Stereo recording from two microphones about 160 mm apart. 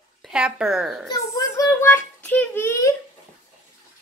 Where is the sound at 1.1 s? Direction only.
20° left (ahead or behind).